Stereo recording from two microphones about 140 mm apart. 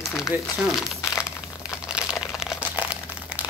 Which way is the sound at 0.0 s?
5° right (ahead or behind).